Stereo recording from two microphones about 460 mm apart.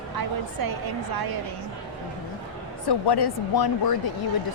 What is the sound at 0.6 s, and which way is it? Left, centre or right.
Speech, right.